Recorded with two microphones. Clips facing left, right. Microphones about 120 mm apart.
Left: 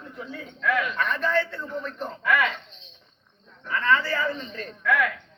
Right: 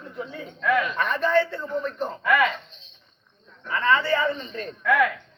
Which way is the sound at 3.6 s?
5° right (ahead or behind).